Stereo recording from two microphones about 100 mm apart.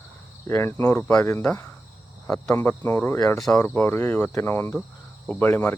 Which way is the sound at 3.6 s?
20° left (ahead or behind).